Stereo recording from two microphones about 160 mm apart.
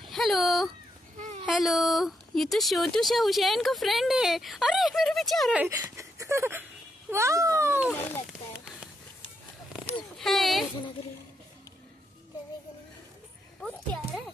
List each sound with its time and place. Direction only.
0.0 s speech: centre (ahead or behind)
1.1 s baby cry: 50° right (ahead or behind)
1.4 s speech: centre (ahead or behind)
5.6 s a child's voice: 20° right (ahead or behind)
10.1 s speech: centre (ahead or behind)
13.6 s a sound: 5° left (ahead or behind)